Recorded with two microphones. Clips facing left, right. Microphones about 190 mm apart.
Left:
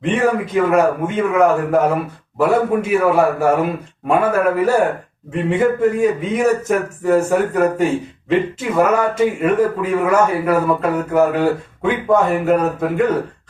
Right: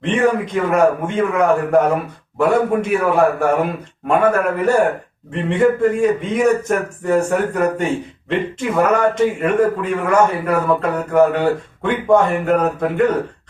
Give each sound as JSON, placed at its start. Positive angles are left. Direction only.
{"t": 0.0, "sound": "a man's voice", "side_deg": 5}